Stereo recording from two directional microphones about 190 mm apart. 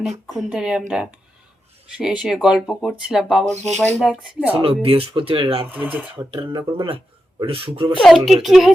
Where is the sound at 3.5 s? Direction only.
35° right (ahead or behind).